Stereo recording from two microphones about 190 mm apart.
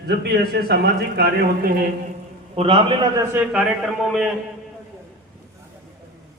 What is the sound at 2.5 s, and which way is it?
Speech, 30° right (ahead or behind).